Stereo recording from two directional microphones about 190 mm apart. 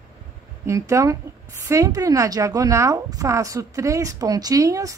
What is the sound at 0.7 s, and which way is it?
A woman's voice, 15° right (ahead or behind).